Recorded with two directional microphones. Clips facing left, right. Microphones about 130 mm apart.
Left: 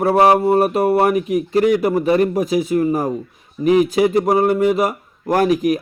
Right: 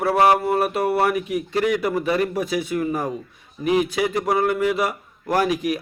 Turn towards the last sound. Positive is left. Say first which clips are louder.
# left 5 dB
turn(degrees=45)  # may be behind; listen again after turning